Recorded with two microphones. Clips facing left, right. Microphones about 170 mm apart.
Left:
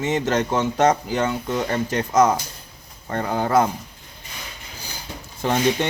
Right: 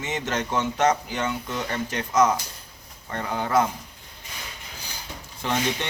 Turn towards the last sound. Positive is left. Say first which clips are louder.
# left 6 dB
turn(degrees=40)  # may be behind; listen again after turning